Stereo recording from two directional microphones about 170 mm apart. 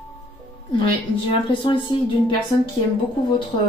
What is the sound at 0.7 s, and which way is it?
A woman's voice, 30° left (ahead or behind).